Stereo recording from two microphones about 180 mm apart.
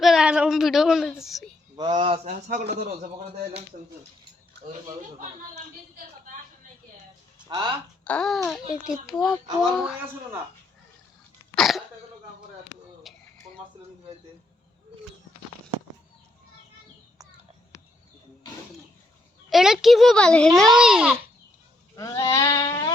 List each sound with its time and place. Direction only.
0.0 s a child's voice: centre (ahead or behind)
2.0 s speech: 30° right (ahead or behind)
2.3 s speech: 45° right (ahead or behind)
2.6 s a man's voice: 65° right (ahead or behind)
7.4 s speech: 25° right (ahead or behind)
8.0 s a child's voice: 5° left (ahead or behind)
11.5 s speech: centre (ahead or behind)
13.1 s a sound: centre (ahead or behind)
19.5 s a child's voice: centre (ahead or behind)
21.9 s goat: 20° left (ahead or behind)